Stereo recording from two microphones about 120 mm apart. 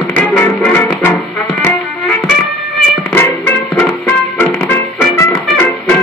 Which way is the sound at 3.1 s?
15° left (ahead or behind).